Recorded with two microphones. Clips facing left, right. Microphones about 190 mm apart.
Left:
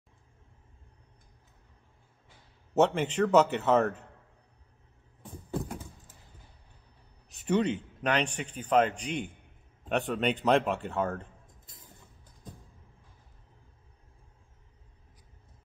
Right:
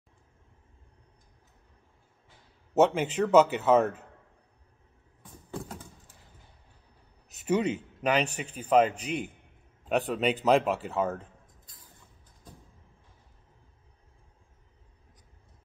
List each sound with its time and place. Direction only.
2.7 s speech: centre (ahead or behind)
7.4 s speech: 5° right (ahead or behind)
11.6 s a sound: 25° left (ahead or behind)